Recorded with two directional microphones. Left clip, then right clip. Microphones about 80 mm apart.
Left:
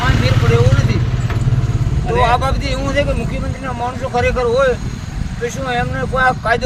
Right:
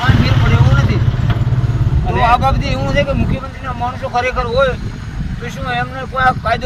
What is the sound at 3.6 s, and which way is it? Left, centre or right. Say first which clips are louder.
Speech: right 1 dB; left.